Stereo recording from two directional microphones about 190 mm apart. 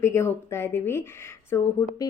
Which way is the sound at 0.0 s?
15° left (ahead or behind).